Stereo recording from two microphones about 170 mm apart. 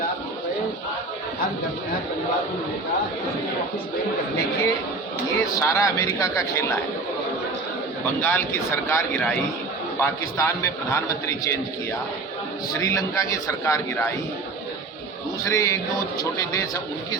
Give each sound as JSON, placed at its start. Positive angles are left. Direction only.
{"t": 5.5, "sound": "a man's voice", "side_deg": 20}
{"t": 8.2, "sound": "speech", "side_deg": 10}
{"t": 12.8, "sound": "a man's voice", "side_deg": 20}
{"t": 15.4, "sound": "a man's voice", "side_deg": 20}